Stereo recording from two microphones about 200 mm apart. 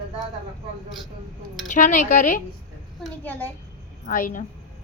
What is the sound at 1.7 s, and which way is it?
Speech, 40° left (ahead or behind).